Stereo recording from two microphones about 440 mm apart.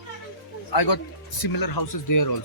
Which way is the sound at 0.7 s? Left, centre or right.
Left.